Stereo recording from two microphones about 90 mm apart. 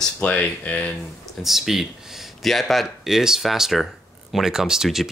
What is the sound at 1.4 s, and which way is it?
Speech, centre (ahead or behind).